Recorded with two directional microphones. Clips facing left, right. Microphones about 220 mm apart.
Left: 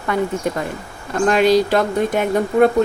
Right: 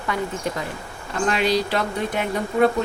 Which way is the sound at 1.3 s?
45° left (ahead or behind).